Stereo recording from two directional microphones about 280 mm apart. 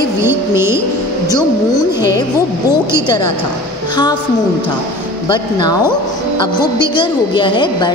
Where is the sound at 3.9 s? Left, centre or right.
Centre.